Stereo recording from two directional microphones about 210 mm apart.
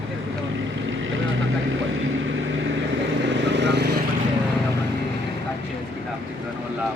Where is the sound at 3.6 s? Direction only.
55° right (ahead or behind).